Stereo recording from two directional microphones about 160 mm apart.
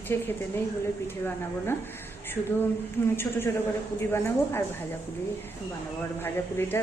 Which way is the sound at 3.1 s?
15° left (ahead or behind).